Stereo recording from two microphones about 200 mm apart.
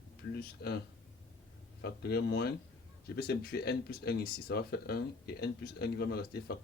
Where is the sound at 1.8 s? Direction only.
55° left (ahead or behind).